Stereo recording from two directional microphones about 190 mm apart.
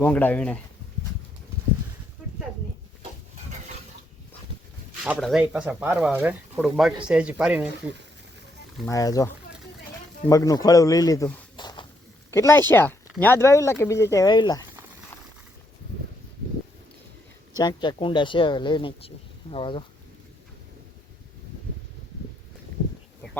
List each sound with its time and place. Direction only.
0.0 s speech: 10° left (ahead or behind)
2.2 s a sound: 5° right (ahead or behind)
5.0 s speech: centre (ahead or behind)
8.9 s speech: 20° left (ahead or behind)
11.5 s a sound: 25° left (ahead or behind)
12.3 s speech: 15° left (ahead or behind)
17.6 s speech: 20° left (ahead or behind)